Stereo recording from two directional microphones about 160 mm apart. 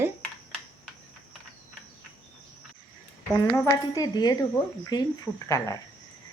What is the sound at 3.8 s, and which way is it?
A woman's voice, 25° left (ahead or behind).